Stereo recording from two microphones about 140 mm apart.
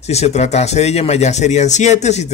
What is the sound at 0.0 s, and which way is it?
Speech, 50° left (ahead or behind).